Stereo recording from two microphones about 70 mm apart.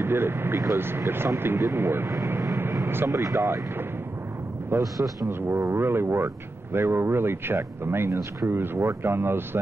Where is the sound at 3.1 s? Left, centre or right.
Right.